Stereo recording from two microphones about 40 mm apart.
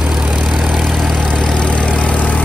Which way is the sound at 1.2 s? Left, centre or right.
Left.